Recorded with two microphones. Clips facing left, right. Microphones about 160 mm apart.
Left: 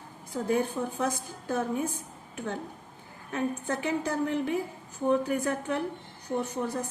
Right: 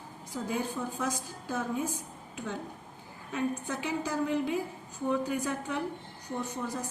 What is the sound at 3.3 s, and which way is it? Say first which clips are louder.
A woman's voice: left 2 dB; 55° left (ahead or behind).